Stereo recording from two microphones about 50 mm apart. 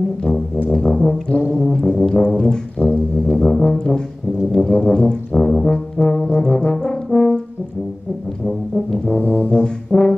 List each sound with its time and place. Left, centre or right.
0.7 s brass instrument: centre
8.5 s brass instrument: centre
9.2 s brass instrument: left
9.5 s brass instrument: centre